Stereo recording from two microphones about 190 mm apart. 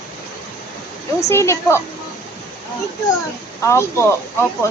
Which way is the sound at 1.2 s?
15° left (ahead or behind).